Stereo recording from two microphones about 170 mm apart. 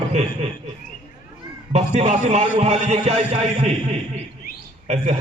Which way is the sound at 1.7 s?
40° right (ahead or behind).